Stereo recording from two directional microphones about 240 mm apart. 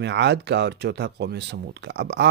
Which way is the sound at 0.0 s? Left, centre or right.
Right.